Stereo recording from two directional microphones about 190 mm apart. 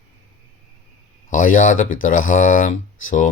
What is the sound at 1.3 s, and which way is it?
Speech, 45° left (ahead or behind).